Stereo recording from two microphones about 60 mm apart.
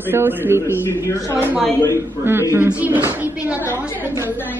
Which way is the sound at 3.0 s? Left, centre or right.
Right.